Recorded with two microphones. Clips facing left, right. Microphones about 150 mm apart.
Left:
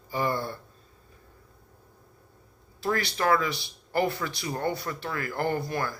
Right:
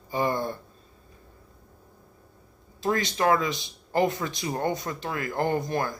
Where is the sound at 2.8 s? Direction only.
20° right (ahead or behind).